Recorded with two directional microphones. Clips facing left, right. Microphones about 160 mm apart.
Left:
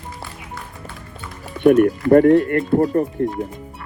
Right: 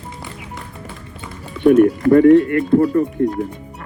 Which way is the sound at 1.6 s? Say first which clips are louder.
Even; 50° left (ahead or behind).